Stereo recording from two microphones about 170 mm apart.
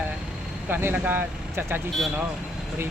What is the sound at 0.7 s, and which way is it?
Speech, 10° right (ahead or behind).